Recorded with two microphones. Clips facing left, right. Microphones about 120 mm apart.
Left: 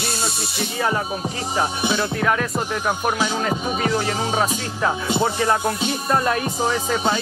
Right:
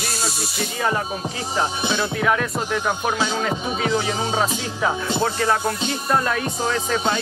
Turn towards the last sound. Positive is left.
turn(degrees=10)  # may be behind; listen again after turning